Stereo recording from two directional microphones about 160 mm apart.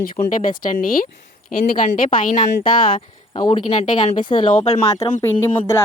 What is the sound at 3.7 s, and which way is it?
Speech, 45° left (ahead or behind).